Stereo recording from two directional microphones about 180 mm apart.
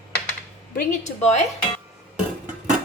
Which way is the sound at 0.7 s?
40° left (ahead or behind).